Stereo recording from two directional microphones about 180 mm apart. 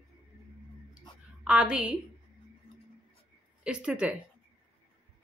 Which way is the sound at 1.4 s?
5° right (ahead or behind).